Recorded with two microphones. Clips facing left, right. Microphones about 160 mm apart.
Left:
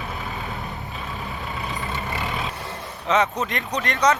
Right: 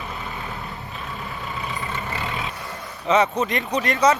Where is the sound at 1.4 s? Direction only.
Centre (ahead or behind).